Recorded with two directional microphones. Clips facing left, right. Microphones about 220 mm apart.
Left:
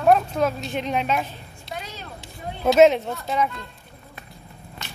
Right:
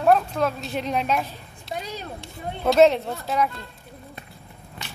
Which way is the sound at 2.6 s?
5° left (ahead or behind).